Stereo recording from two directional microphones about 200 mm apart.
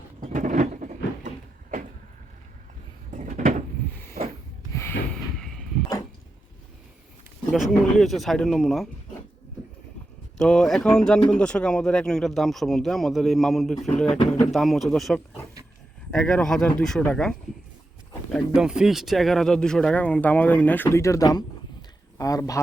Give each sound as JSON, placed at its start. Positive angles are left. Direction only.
{"t": 0.2, "sound": "vehicle", "side_deg": -40}
{"t": 3.1, "sound": "a sound", "side_deg": -40}
{"t": 4.7, "sound": "snort", "side_deg": 15}
{"t": 5.4, "sound": "vehicle", "side_deg": 0}
{"t": 7.5, "sound": "speech", "side_deg": 0}
{"t": 10.3, "sound": "speech", "side_deg": 5}
{"t": 18.3, "sound": "speech", "side_deg": -5}